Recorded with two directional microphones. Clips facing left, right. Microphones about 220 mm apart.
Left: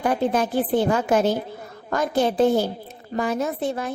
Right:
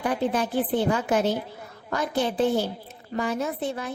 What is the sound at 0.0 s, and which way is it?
A woman's voice, 45° left (ahead or behind).